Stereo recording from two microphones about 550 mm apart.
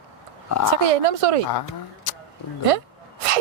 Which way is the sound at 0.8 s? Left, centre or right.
Right.